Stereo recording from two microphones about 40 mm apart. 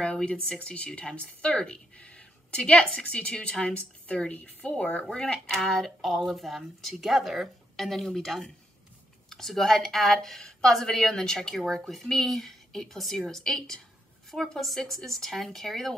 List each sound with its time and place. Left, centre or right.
0.0 s a woman's voice: left
4.3 s a woman's voice: left
5.1 s speech: left
5.5 s speech: centre
5.9 s speech: centre